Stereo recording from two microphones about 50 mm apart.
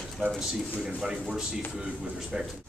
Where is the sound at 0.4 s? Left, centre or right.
Centre.